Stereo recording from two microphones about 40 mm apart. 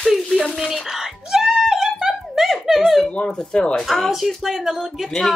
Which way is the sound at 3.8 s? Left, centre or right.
Centre.